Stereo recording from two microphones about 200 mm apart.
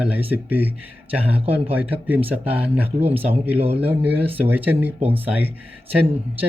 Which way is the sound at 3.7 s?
10° right (ahead or behind).